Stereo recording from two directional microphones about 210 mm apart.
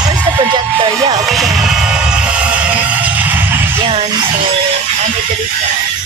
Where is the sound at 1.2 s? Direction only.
Centre (ahead or behind).